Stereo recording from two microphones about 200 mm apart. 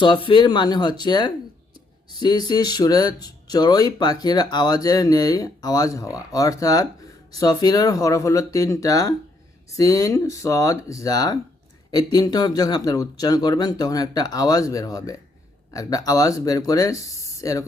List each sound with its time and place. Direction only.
0.0 s speech: 25° left (ahead or behind)